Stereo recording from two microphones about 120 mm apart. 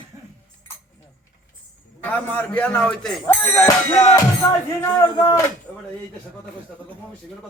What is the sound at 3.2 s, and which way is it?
Music, 20° left (ahead or behind).